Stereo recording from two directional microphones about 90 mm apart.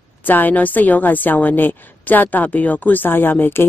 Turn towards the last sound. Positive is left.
turn(degrees=20)  # may be behind; listen again after turning